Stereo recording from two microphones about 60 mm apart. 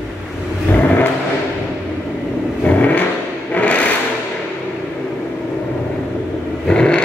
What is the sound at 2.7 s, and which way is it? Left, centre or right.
Vehicle, left.